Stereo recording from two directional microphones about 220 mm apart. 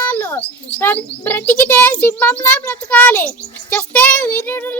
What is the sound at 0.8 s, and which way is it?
Child singing, 10° left (ahead or behind).